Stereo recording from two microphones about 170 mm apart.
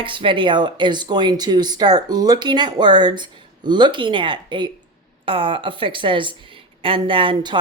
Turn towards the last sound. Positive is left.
turn(degrees=-30)  # may be behind; listen again after turning